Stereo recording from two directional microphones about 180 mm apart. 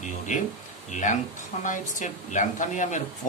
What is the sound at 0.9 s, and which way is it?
A man's voice, 40° left (ahead or behind).